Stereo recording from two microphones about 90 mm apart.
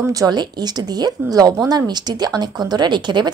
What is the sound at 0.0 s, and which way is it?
Speech, 40° right (ahead or behind).